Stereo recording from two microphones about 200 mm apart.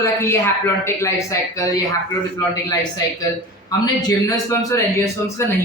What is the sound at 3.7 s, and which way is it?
A man's voice, 20° left (ahead or behind).